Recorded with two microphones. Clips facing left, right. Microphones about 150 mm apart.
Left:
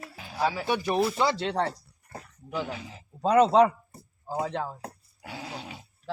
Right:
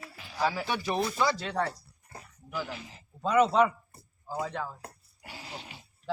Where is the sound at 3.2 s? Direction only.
35° left (ahead or behind).